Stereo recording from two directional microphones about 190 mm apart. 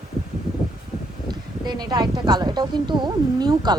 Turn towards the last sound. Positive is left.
turn(degrees=-20)  # may be behind; listen again after turning